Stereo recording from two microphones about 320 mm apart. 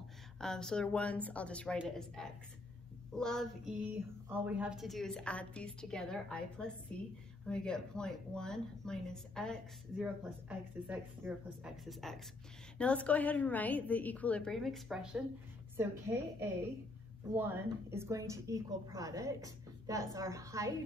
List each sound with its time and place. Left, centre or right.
0.4 s a woman's voice: centre